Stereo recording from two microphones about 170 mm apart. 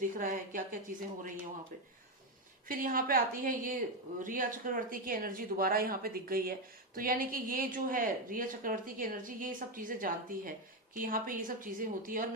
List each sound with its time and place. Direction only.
0.0 s speech: 50° right (ahead or behind)
2.6 s a woman's voice: 55° right (ahead or behind)